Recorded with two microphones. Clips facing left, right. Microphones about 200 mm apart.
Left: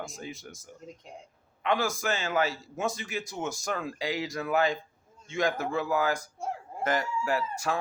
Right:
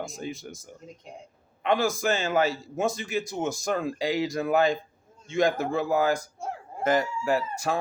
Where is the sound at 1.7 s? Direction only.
25° right (ahead or behind).